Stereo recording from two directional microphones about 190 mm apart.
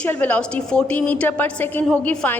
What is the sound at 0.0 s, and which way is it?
A woman's voice, 10° left (ahead or behind).